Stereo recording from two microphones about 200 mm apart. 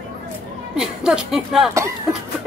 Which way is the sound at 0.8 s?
5° right (ahead or behind).